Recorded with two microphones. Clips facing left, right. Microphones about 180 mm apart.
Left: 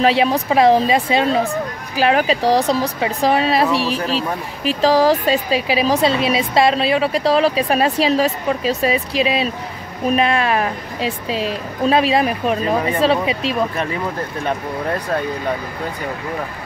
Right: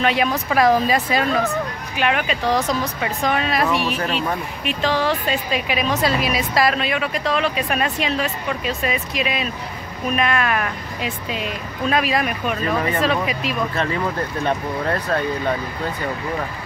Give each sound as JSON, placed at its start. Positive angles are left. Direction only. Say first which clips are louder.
{"t": 0.0, "sound": "a woman's voice", "louder": "left 4 dB", "side_deg": 30}